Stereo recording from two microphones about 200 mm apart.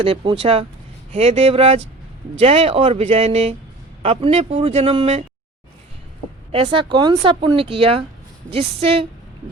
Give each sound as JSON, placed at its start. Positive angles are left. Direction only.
{"t": 0.0, "sound": "speech", "side_deg": -25}
{"t": 6.5, "sound": "speech", "side_deg": -25}